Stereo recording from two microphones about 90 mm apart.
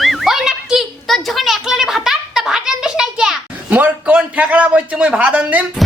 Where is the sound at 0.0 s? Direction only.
Centre (ahead or behind); by 5.6 s 15° right (ahead or behind).